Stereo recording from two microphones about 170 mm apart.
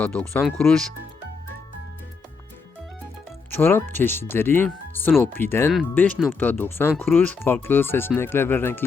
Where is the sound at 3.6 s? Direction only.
15° left (ahead or behind).